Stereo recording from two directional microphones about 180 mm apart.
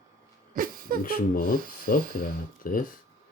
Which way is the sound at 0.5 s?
55° right (ahead or behind).